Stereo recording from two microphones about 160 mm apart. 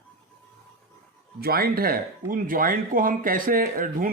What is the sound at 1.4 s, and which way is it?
Speech, 70° right (ahead or behind).